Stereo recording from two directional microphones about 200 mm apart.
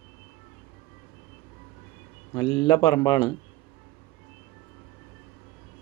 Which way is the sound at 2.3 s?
20° left (ahead or behind).